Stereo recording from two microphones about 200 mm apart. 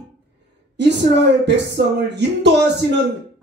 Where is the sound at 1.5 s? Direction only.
60° right (ahead or behind).